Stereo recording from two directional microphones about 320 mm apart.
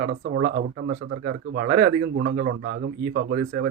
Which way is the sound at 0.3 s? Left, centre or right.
Right.